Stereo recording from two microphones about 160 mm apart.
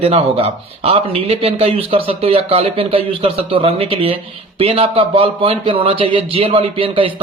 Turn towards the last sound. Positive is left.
turn(degrees=-35)  # may be behind; listen again after turning